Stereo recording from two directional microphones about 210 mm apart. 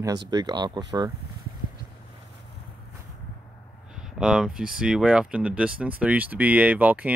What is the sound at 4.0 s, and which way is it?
Speech, 5° right (ahead or behind).